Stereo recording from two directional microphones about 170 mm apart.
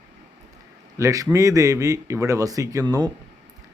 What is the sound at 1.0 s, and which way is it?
Speech, 20° right (ahead or behind).